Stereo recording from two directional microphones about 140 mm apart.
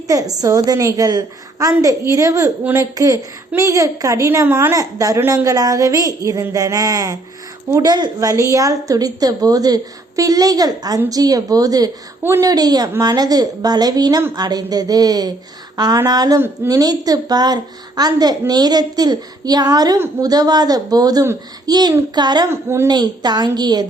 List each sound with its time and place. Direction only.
0.1 s a woman's voice: 25° right (ahead or behind)
22.4 s a woman's voice: 20° right (ahead or behind)
22.9 s a woman's voice: 30° right (ahead or behind)